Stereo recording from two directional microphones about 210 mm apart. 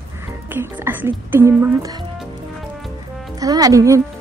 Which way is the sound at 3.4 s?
15° right (ahead or behind).